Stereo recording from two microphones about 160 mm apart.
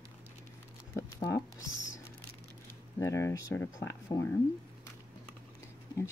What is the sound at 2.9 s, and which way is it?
Speech, 20° left (ahead or behind).